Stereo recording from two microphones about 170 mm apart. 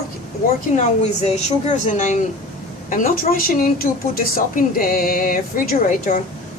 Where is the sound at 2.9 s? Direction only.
55° left (ahead or behind).